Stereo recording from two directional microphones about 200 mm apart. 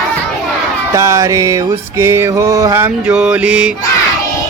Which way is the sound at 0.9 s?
15° right (ahead or behind).